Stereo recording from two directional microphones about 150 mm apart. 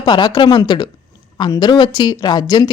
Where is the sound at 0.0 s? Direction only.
25° left (ahead or behind).